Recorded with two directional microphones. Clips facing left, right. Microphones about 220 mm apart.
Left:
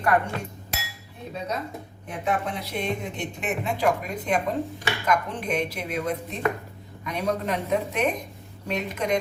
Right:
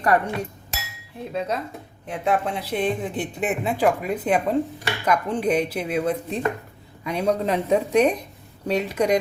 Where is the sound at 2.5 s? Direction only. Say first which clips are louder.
Right 5 dB; 35° right (ahead or behind).